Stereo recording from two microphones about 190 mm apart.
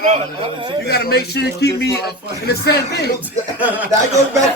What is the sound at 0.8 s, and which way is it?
Speech, 55° left (ahead or behind).